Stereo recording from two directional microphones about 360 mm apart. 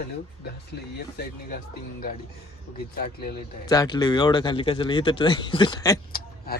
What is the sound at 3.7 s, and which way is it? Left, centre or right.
Speech, centre.